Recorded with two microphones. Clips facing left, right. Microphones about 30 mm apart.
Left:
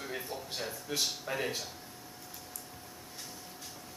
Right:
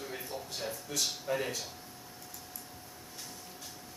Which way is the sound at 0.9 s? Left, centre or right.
Left.